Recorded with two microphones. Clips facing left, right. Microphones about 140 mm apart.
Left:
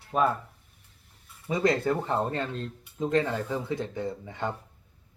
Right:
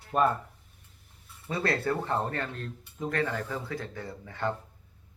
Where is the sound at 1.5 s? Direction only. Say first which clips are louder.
Left 4 dB; 15° left (ahead or behind).